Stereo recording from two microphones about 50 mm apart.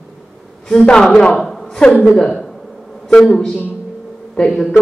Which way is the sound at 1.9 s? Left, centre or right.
Left.